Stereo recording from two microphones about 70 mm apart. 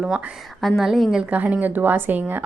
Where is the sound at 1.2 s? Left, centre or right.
Centre.